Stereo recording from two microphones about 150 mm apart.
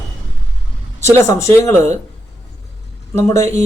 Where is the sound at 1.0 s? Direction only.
20° left (ahead or behind).